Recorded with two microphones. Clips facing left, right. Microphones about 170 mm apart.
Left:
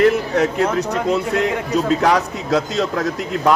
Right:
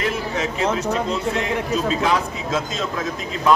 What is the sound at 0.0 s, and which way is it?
A man's voice, 65° left (ahead or behind).